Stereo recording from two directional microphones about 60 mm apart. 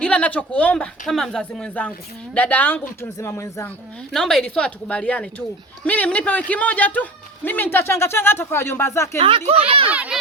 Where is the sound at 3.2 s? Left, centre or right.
Left.